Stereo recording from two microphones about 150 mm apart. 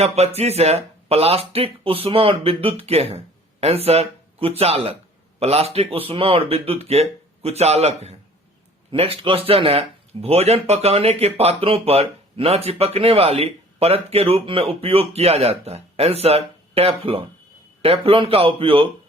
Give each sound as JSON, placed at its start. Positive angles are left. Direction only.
{"t": 0.0, "sound": "speech", "side_deg": -45}